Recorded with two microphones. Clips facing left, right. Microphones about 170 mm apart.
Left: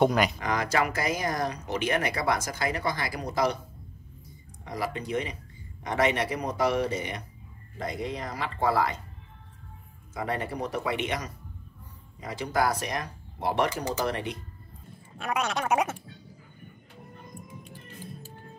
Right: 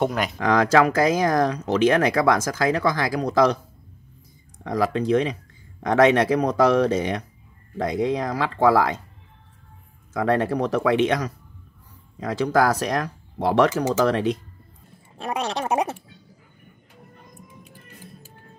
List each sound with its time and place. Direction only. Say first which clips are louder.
0.0 s speech: left 1 dB; centre (ahead or behind)
0.4 s speech: right 9 dB; 90° right
4.6 s speech: right 11 dB; 90° right
10.1 s speech: right 10 dB; 90° right
15.1 s speech: right 3 dB; 30° right (ahead or behind)